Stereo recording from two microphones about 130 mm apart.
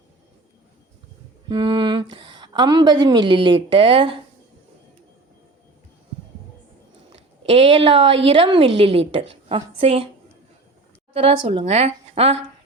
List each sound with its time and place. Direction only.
1.5 s a woman's voice: 35° right (ahead or behind)
7.1 s a woman's voice: 45° right (ahead or behind)
11.1 s a woman's voice: 50° right (ahead or behind)